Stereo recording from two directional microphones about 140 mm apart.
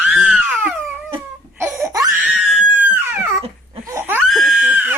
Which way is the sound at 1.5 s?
20° right (ahead or behind).